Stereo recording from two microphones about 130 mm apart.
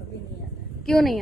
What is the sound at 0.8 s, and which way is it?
Speech, centre (ahead or behind).